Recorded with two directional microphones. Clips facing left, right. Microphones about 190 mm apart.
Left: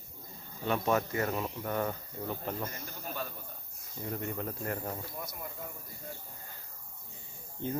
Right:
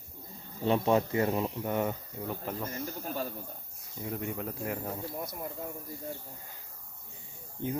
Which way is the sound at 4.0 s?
5° right (ahead or behind).